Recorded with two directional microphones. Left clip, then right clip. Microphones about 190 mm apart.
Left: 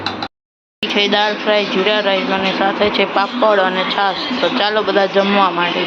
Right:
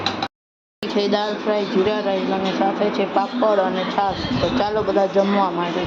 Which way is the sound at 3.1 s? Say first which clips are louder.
Left 5 dB; 10° left (ahead or behind).